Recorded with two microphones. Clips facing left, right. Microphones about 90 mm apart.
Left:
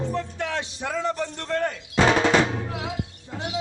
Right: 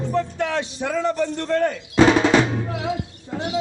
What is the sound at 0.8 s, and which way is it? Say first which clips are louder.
Speech: right 5 dB; 55° right (ahead or behind).